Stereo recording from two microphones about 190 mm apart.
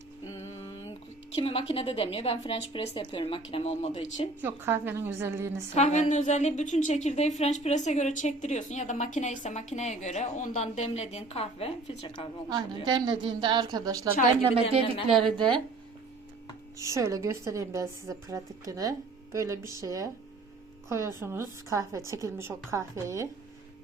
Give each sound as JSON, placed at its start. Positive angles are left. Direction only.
{"t": 1.4, "sound": "a woman's voice", "side_deg": 30}
{"t": 4.4, "sound": "a woman's voice", "side_deg": -10}
{"t": 5.7, "sound": "a woman's voice", "side_deg": 40}
{"t": 12.5, "sound": "a woman's voice", "side_deg": -20}
{"t": 15.2, "sound": "a woman's voice", "side_deg": -25}
{"t": 16.7, "sound": "a woman's voice", "side_deg": -15}